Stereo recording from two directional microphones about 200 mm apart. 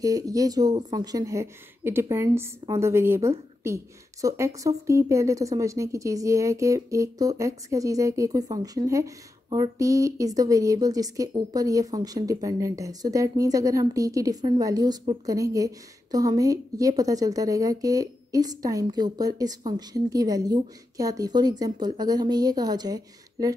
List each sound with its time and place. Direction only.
0.0 s a woman's voice: 15° right (ahead or behind)